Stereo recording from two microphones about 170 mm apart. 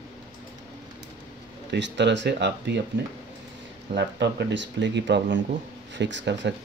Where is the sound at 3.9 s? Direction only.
90° right.